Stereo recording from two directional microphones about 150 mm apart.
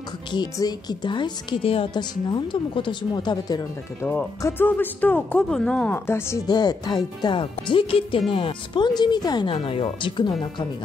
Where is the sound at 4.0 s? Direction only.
15° left (ahead or behind).